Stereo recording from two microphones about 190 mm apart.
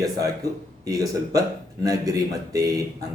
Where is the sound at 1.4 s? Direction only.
20° right (ahead or behind).